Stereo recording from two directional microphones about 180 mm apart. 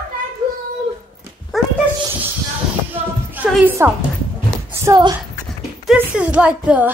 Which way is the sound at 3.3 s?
10° right (ahead or behind).